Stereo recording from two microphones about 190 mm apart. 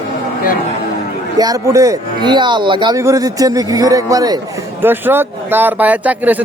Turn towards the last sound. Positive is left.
turn(degrees=-10)  # may be behind; listen again after turning